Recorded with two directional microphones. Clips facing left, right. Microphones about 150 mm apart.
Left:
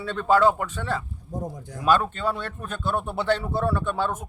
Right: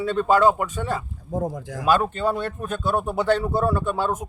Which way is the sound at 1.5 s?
90° right.